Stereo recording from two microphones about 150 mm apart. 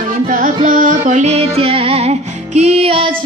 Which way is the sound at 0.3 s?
65° right (ahead or behind).